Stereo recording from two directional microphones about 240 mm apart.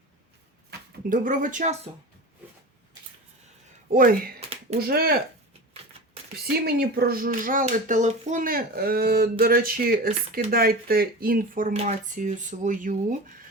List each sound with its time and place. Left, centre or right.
1.1 s speech: right
3.9 s speech: right
4.4 s a sound: right
4.8 s speech: right
6.3 s speech: right